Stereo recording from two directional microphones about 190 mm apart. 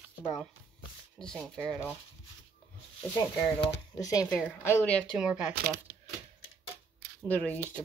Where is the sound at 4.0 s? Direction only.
20° left (ahead or behind).